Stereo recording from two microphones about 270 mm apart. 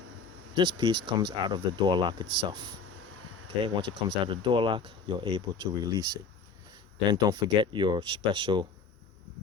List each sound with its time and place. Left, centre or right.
0.5 s speech: centre
3.8 s speech: centre